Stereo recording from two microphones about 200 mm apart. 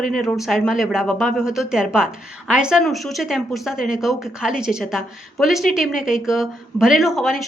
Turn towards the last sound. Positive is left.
turn(degrees=0)  # may be behind; listen again after turning